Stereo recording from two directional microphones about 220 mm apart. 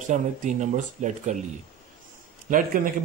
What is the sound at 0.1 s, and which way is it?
Speech, 35° right (ahead or behind).